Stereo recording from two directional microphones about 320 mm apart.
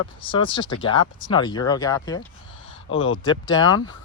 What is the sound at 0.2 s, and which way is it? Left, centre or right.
Speech, centre.